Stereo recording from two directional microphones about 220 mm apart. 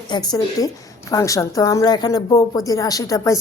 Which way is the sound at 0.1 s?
20° left (ahead or behind).